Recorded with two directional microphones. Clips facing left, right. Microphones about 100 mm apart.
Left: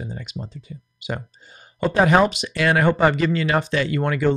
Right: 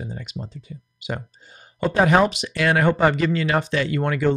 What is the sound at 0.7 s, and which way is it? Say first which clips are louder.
Speech: left 1 dB; 20° left (ahead or behind).